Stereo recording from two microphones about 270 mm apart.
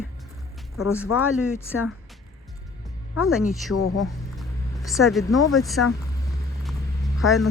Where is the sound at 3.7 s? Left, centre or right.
Left.